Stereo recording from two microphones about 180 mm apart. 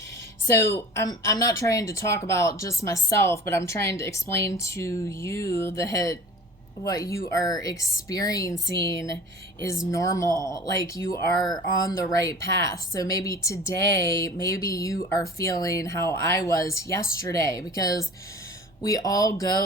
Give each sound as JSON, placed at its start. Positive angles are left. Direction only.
{"t": 0.5, "sound": "speech", "side_deg": 15}